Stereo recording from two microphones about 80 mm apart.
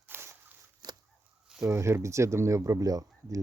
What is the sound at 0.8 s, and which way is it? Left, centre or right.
Fowl, right.